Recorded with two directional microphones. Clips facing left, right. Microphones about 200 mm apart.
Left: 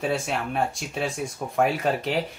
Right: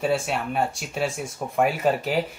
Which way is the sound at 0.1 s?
Centre (ahead or behind).